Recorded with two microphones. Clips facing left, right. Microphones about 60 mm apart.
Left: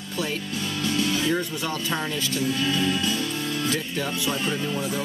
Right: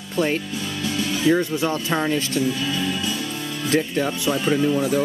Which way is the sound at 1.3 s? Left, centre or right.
Right.